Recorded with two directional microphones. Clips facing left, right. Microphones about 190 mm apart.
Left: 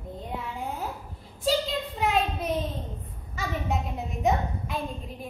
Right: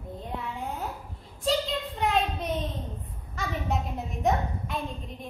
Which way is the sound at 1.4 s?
Centre (ahead or behind).